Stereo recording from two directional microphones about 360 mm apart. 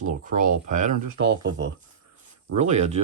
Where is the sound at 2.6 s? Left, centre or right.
Centre.